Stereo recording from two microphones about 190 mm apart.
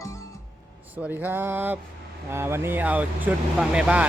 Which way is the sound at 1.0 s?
10° right (ahead or behind).